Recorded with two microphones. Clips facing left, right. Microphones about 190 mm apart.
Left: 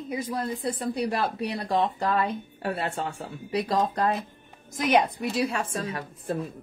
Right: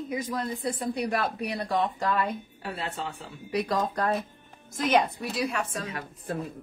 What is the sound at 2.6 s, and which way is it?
Speech, 55° left (ahead or behind).